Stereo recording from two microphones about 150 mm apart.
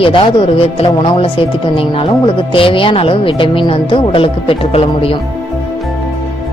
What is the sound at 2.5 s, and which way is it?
A woman's voice, 35° left (ahead or behind).